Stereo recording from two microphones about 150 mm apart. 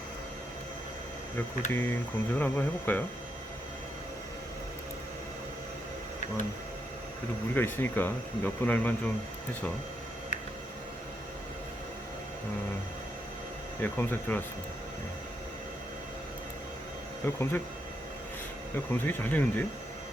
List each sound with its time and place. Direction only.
1.7 s speech: 15° left (ahead or behind)
7.5 s speech: 15° left (ahead or behind)
13.8 s speech: 15° left (ahead or behind)
17.2 s speech: 15° left (ahead or behind)
18.9 s speech: 15° left (ahead or behind)